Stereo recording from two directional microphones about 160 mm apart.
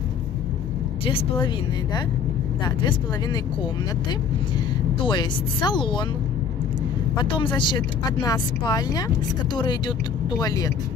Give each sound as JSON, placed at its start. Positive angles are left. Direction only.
{"t": 1.0, "sound": "speech", "side_deg": 35}
{"t": 2.6, "sound": "speech", "side_deg": 25}
{"t": 5.0, "sound": "speech", "side_deg": 30}
{"t": 7.2, "sound": "speech", "side_deg": 30}